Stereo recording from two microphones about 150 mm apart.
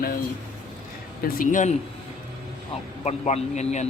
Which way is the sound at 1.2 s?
65° left (ahead or behind).